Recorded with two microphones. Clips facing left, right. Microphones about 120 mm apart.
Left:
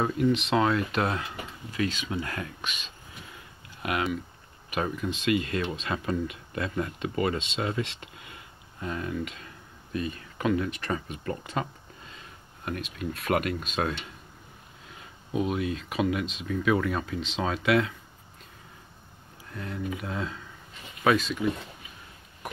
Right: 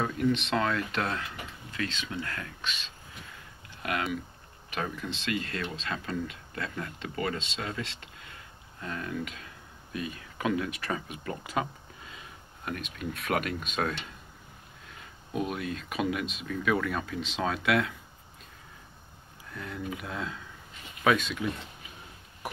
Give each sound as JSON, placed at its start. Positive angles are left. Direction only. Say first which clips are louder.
{"t": 0.2, "sound": "speech", "louder": "left 3 dB", "side_deg": 5}
{"t": 8.8, "sound": "speech", "louder": "left 3 dB", "side_deg": 10}
{"t": 15.3, "sound": "speech", "louder": "left 4 dB", "side_deg": 0}
{"t": 19.5, "sound": "speech", "louder": "left 3 dB", "side_deg": 0}